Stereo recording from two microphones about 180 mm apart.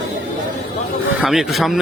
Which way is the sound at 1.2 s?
Centre (ahead or behind).